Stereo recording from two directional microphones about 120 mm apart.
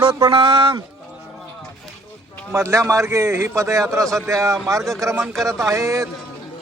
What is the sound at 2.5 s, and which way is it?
A man's voice, 25° right (ahead or behind).